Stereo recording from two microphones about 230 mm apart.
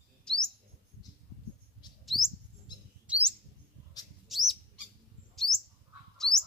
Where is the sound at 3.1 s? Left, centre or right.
Centre.